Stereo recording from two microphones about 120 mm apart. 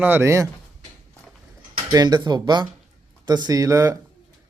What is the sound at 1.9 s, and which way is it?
Speech, 35° right (ahead or behind).